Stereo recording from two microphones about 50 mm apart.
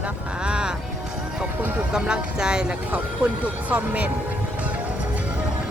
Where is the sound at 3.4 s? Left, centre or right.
Right.